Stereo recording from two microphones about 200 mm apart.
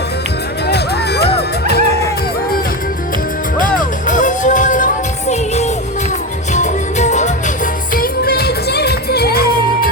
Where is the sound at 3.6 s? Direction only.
40° left (ahead or behind).